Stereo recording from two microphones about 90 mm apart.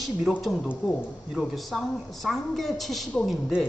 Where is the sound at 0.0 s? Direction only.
Centre (ahead or behind).